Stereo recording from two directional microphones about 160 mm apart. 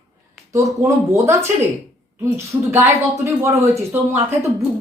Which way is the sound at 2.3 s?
15° right (ahead or behind).